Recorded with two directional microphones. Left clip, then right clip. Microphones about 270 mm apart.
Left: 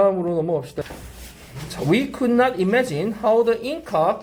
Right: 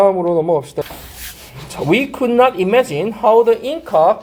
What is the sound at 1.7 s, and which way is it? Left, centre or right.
Speech, centre.